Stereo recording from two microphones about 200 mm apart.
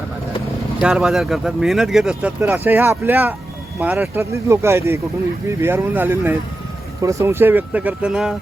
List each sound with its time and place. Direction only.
0.8 s speech: 5° right (ahead or behind)